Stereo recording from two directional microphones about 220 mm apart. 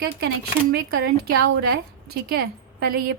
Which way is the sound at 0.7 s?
45° right (ahead or behind).